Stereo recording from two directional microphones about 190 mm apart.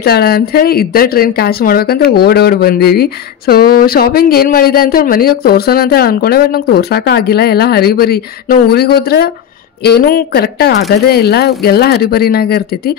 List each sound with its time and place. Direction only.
0.0 s speech: 55° left (ahead or behind)